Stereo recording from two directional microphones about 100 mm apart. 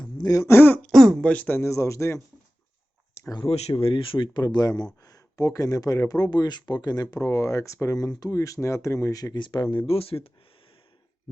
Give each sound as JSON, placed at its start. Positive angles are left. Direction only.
{"t": 0.2, "sound": "speech", "side_deg": 35}
{"t": 0.9, "sound": "speech", "side_deg": 5}
{"t": 3.2, "sound": "a sound", "side_deg": 25}
{"t": 3.5, "sound": "speech", "side_deg": 85}
{"t": 4.4, "sound": "speech", "side_deg": 40}
{"t": 9.3, "sound": "speech", "side_deg": 50}